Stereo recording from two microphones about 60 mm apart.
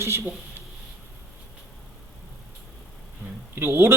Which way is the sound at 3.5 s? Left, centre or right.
Right.